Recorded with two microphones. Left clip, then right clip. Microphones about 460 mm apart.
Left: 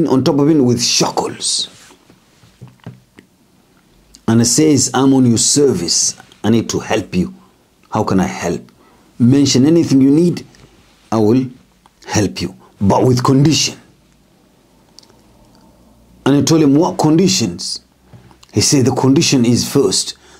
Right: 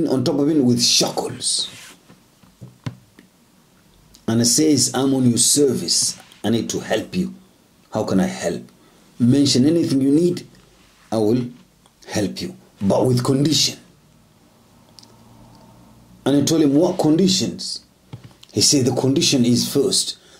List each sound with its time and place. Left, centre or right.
0.0 s speech: left
4.1 s speech: left
16.2 s speech: left